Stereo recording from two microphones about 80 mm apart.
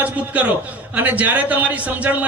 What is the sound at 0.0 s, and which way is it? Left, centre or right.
A man's voice, centre.